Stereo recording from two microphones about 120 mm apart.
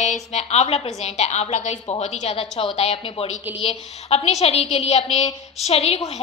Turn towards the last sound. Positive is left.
turn(degrees=60)  # may be behind; listen again after turning